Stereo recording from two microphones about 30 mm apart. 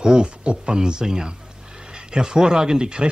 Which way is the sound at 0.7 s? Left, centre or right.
Right.